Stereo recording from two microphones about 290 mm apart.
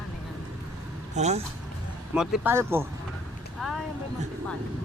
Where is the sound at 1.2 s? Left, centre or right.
Right.